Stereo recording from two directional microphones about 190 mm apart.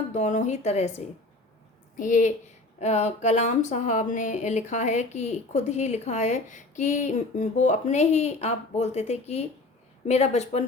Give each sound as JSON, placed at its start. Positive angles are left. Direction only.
{"t": 0.1, "sound": "speech", "side_deg": 40}